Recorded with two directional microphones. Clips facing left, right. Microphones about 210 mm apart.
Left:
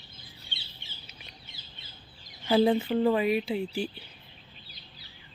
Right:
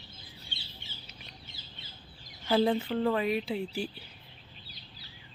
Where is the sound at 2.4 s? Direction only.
5° left (ahead or behind).